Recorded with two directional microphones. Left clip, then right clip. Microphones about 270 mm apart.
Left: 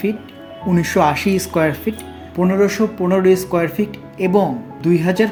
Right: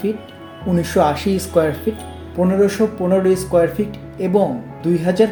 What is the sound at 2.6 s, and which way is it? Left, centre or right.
Speech, centre.